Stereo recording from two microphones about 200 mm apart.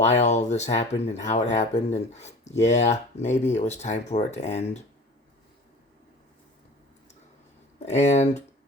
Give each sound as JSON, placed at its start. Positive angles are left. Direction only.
{"t": 0.0, "sound": "speech", "side_deg": 35}
{"t": 7.9, "sound": "speech", "side_deg": 35}